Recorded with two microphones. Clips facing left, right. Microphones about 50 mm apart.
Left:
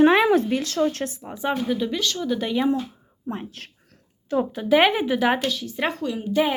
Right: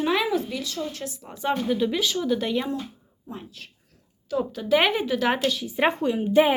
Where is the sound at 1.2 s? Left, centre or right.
Centre.